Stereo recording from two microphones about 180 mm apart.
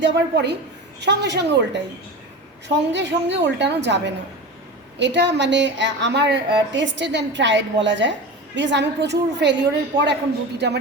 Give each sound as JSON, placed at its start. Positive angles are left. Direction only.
{"t": 0.0, "sound": "speech", "side_deg": -70}
{"t": 8.5, "sound": "speech", "side_deg": -80}